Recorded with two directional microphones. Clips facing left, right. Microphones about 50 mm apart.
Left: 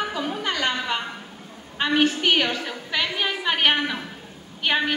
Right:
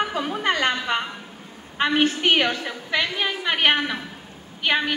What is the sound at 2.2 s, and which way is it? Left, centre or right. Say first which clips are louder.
Speech: right 1 dB; right.